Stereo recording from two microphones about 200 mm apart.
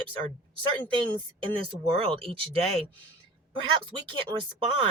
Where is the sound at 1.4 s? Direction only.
25° right (ahead or behind).